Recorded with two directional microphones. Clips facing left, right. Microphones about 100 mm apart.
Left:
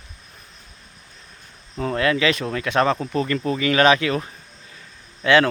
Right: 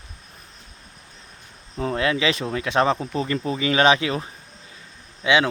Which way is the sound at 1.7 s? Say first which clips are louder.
Left 2 dB; 25° right (ahead or behind).